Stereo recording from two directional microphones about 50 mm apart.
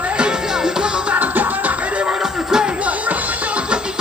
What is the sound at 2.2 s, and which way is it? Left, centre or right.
Music, centre.